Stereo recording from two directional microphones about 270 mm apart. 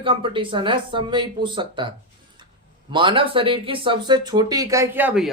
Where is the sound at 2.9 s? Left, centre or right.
Centre.